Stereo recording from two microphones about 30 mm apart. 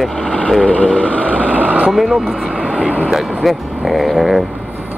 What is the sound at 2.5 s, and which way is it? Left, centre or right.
Vehicle, right.